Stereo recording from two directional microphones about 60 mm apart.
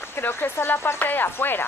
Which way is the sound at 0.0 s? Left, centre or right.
Left.